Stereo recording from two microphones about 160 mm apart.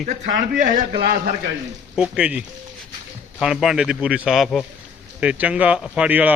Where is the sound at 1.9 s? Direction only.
5° right (ahead or behind).